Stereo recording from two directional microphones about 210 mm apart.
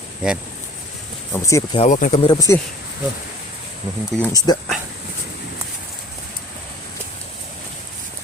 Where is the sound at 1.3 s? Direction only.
15° left (ahead or behind).